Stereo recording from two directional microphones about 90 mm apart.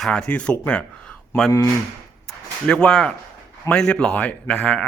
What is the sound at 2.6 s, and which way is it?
Speech, 10° left (ahead or behind).